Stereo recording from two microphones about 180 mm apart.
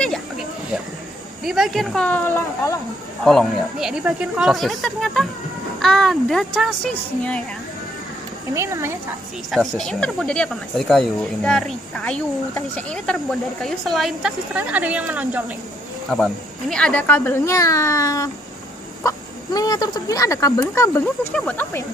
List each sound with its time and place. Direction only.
0.0 s a sound: centre (ahead or behind)
1.4 s speech: centre (ahead or behind); by 2.8 s 15° left (ahead or behind)
3.3 s speech: centre (ahead or behind)
8.5 s speech: 15° right (ahead or behind)
9.5 s speech: centre (ahead or behind)